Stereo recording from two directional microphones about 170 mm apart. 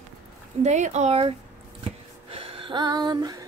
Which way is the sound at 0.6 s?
45° right (ahead or behind).